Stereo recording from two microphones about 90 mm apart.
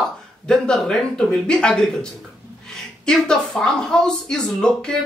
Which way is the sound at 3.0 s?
5° left (ahead or behind).